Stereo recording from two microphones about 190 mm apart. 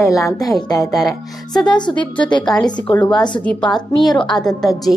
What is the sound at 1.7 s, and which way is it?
A woman's voice, 25° left (ahead or behind).